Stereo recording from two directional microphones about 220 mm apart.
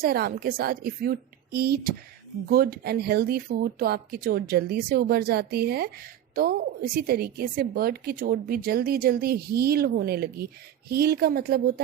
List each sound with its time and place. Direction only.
0.0 s a woman's voice: 45° right (ahead or behind)